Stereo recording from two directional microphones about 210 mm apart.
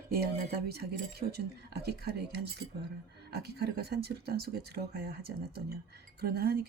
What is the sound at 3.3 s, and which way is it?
Speech, 50° right (ahead or behind).